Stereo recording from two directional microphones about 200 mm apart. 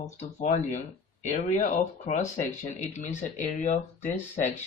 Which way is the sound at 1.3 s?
40° left (ahead or behind).